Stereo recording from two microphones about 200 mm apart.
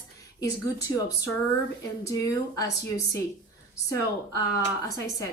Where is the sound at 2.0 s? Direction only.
15° left (ahead or behind).